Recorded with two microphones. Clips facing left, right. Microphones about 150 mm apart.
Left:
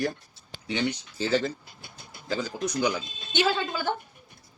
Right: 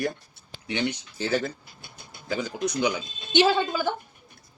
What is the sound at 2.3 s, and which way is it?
Speech, 15° right (ahead or behind).